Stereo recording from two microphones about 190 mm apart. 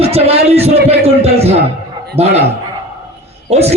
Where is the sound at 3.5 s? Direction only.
35° right (ahead or behind).